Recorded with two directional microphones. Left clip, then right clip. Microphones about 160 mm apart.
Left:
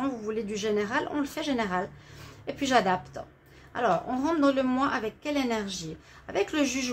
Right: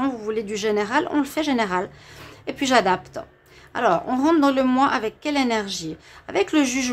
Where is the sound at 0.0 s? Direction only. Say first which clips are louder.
Right 6 dB; 30° right (ahead or behind).